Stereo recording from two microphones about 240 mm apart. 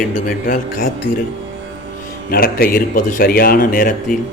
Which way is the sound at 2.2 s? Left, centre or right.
Left.